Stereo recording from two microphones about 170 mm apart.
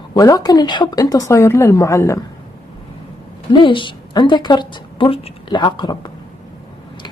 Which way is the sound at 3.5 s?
30° left (ahead or behind).